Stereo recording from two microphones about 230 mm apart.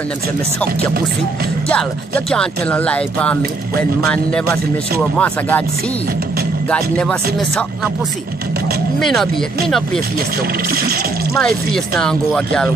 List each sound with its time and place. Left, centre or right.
1.7 s speech: centre
5.1 s speech: centre
6.7 s speech: centre
9.0 s speech: centre
10.7 s speech: right
11.3 s speech: centre